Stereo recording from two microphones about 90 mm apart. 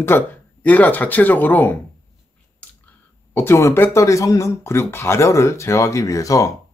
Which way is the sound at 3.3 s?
30° left (ahead or behind).